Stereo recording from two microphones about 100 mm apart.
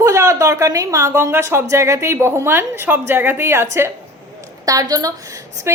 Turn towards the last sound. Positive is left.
turn(degrees=-25)  # may be behind; listen again after turning